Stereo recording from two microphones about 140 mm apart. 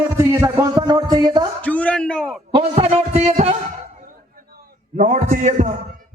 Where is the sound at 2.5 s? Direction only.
45° right (ahead or behind).